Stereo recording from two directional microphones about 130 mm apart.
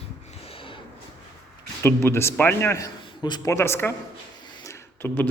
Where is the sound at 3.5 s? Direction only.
20° left (ahead or behind).